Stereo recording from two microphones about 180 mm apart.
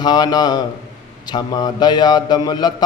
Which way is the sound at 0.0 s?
25° left (ahead or behind).